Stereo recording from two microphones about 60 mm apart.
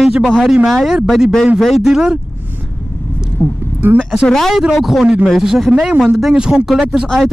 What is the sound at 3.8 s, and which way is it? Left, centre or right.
Speech, right.